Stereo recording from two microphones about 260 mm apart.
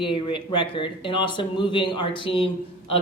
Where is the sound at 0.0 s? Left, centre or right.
Centre.